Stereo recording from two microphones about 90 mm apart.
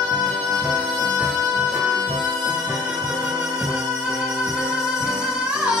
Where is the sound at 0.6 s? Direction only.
5° right (ahead or behind).